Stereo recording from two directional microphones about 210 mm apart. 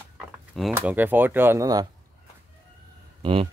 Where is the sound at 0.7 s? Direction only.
10° right (ahead or behind).